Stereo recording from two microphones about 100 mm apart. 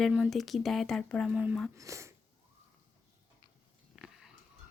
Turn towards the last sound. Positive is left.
turn(degrees=-5)  # may be behind; listen again after turning